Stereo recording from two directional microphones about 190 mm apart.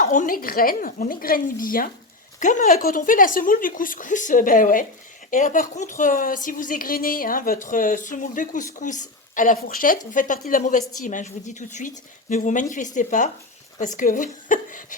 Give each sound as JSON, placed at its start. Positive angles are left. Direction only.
{"t": 0.0, "sound": "a woman's voice", "side_deg": 45}